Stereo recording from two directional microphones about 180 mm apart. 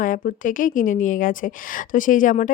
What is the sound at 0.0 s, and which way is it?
A woman's voice, 50° left (ahead or behind).